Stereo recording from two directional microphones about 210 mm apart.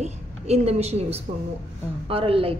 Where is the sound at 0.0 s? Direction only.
30° right (ahead or behind).